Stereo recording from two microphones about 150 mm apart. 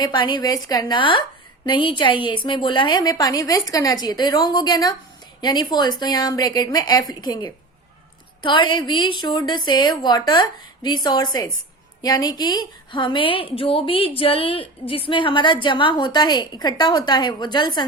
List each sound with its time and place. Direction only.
0.0 s a woman's voice: 30° left (ahead or behind)